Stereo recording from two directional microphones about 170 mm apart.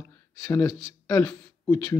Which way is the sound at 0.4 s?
15° left (ahead or behind).